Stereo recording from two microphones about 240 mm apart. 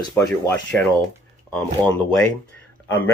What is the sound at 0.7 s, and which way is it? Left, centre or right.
Speech, centre.